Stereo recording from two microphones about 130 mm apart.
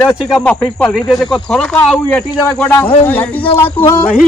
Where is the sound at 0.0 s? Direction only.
20° left (ahead or behind).